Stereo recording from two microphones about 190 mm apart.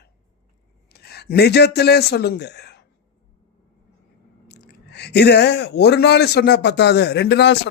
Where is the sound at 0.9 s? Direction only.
60° left (ahead or behind).